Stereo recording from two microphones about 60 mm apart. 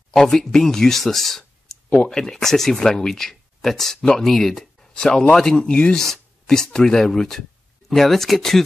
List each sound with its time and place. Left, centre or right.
0.1 s speech: centre
1.9 s speech: centre
2.1 s speech: centre